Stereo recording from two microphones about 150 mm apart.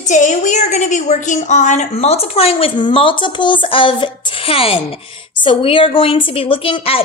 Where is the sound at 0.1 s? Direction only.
55° left (ahead or behind).